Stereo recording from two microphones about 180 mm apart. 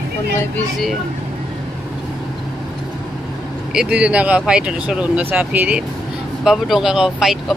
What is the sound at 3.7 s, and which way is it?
Speech, 5° right (ahead or behind).